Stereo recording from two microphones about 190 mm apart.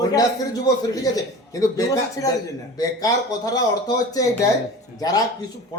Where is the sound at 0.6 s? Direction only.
20° left (ahead or behind).